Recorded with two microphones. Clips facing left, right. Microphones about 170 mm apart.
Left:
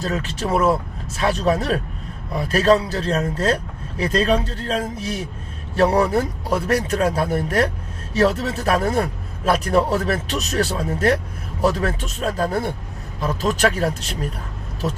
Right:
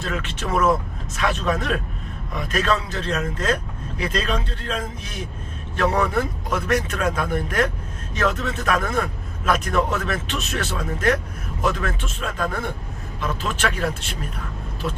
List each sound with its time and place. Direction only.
0.0 s speech: 35° left (ahead or behind)